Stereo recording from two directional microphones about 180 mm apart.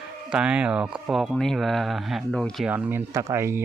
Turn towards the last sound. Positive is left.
turn(degrees=-15)  # may be behind; listen again after turning